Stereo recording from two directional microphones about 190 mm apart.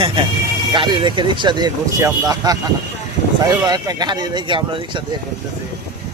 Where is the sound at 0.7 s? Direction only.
25° right (ahead or behind).